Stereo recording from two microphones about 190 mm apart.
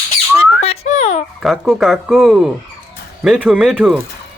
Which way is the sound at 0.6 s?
35° left (ahead or behind).